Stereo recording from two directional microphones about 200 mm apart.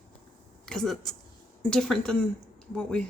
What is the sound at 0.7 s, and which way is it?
Speech, centre (ahead or behind).